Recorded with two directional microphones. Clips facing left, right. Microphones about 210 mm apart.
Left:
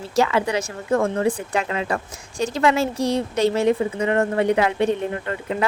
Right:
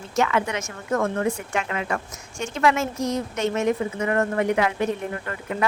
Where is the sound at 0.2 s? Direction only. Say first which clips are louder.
Left 3 dB; 30° left (ahead or behind).